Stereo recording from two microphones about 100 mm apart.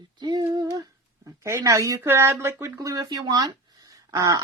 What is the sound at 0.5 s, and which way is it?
Humming, 40° right (ahead or behind).